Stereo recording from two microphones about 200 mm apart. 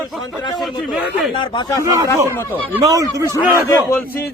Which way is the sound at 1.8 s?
15° right (ahead or behind).